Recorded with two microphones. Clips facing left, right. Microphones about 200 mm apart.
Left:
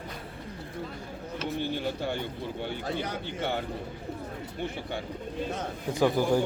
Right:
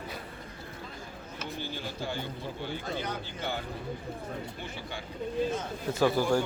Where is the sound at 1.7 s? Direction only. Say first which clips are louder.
Left 5 dB; 60° left (ahead or behind).